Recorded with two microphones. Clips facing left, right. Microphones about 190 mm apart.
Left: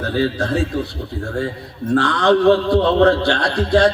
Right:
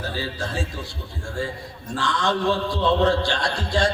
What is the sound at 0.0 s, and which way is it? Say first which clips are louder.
A man's voice: left 10 dB; 60° left (ahead or behind).